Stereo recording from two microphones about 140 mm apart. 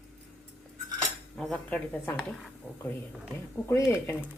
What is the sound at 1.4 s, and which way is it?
Speech, 5° left (ahead or behind).